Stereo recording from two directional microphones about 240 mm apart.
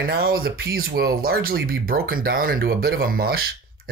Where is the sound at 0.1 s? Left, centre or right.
Right.